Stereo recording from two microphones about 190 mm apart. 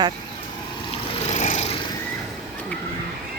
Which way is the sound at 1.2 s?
40° left (ahead or behind).